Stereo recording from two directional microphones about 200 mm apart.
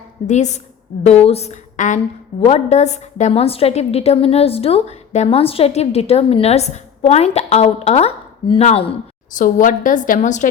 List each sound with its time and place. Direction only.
0.3 s a woman's voice: 35° left (ahead or behind)
9.4 s a woman's voice: 40° left (ahead or behind)